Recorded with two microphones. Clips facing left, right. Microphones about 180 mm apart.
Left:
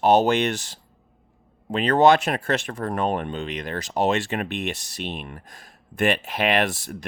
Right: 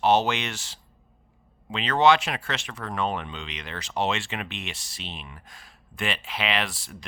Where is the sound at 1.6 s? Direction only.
55° left (ahead or behind).